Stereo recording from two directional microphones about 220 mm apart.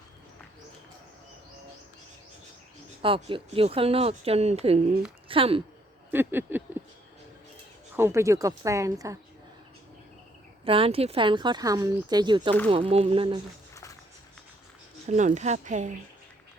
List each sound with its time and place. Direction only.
3.0 s speech: 25° right (ahead or behind)
6.1 s a woman's voice: 10° right (ahead or behind)
7.9 s a woman's voice: 10° right (ahead or behind)
10.7 s speech: 25° right (ahead or behind)
15.1 s a woman's voice: 30° right (ahead or behind)